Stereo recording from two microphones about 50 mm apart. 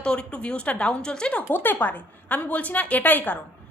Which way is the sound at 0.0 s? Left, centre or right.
Centre.